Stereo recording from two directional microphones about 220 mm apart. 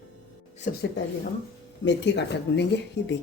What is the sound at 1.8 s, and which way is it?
A woman's voice, 55° left (ahead or behind).